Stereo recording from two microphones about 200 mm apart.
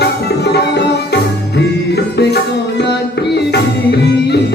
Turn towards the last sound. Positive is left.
turn(degrees=55)  # may be behind; listen again after turning